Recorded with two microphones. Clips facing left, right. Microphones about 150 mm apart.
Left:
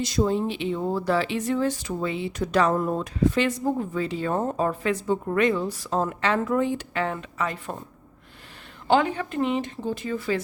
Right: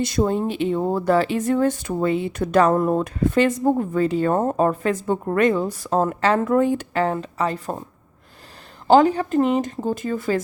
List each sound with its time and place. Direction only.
0.0 s speech: 55° right (ahead or behind); by 7.8 s 35° right (ahead or behind)
8.9 s speech: 35° right (ahead or behind)